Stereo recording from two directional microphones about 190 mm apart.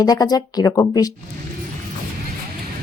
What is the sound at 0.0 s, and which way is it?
Speech, 20° left (ahead or behind).